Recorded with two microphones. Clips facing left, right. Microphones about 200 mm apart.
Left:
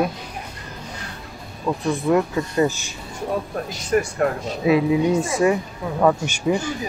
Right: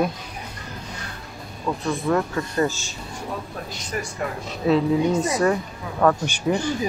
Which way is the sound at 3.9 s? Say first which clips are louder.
Left 10 dB; 50° left (ahead or behind).